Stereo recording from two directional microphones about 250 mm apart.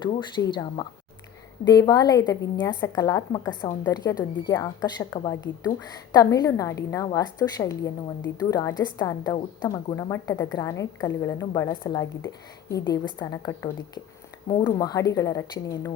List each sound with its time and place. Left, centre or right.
0.0 s a woman's voice: centre